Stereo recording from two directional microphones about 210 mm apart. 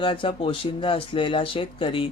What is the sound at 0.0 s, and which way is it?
Speech, 25° left (ahead or behind).